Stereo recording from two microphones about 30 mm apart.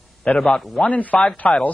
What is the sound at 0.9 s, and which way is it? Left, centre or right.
Speech, left.